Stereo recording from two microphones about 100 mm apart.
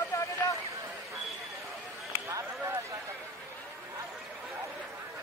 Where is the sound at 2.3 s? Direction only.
30° right (ahead or behind).